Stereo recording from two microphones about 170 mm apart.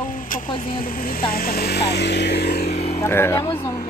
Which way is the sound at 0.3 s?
55° left (ahead or behind).